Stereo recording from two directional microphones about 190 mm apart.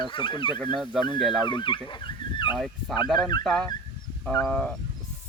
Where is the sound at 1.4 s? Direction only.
25° left (ahead or behind).